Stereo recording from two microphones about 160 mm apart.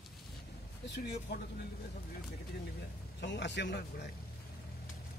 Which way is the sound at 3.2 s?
90° left.